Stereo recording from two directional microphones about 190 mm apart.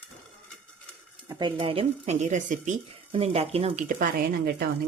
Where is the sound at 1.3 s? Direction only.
25° right (ahead or behind).